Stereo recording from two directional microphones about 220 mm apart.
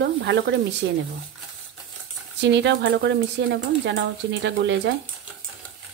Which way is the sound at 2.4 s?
55° right (ahead or behind).